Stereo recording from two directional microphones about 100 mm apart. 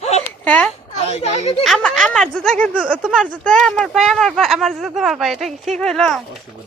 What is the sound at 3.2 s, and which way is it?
Speech, 5° left (ahead or behind).